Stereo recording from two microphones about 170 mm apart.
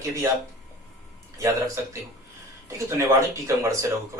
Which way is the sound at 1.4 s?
20° right (ahead or behind).